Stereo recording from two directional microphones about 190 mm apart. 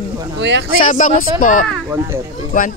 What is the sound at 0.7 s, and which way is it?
Speech, 45° left (ahead or behind).